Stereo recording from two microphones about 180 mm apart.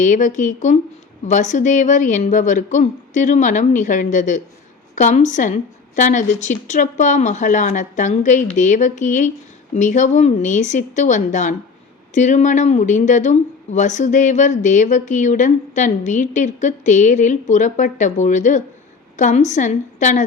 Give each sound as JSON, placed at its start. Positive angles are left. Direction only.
{"t": 0.0, "sound": "speech", "side_deg": 45}